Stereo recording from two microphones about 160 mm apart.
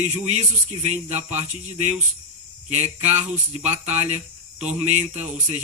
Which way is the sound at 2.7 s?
45° right (ahead or behind).